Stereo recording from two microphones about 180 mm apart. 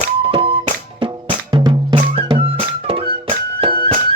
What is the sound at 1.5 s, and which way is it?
Music, 25° right (ahead or behind).